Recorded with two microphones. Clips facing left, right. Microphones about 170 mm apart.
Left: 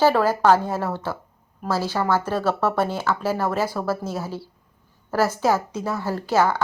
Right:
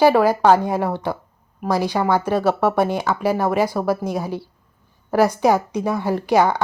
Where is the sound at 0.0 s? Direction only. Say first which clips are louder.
Right 4 dB; 15° right (ahead or behind).